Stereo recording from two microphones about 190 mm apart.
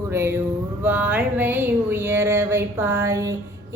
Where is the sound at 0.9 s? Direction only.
10° right (ahead or behind).